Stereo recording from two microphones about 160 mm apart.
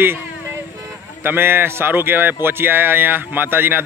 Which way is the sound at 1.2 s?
15° right (ahead or behind).